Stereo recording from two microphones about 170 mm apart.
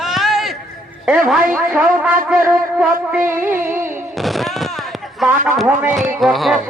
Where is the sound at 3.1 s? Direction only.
10° right (ahead or behind).